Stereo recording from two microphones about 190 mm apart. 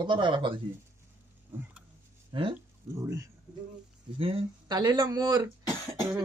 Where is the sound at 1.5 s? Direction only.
10° right (ahead or behind).